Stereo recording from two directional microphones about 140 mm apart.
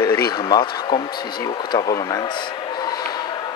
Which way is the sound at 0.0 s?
30° left (ahead or behind).